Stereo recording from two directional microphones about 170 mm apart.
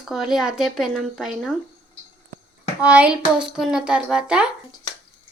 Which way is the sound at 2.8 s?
5° right (ahead or behind).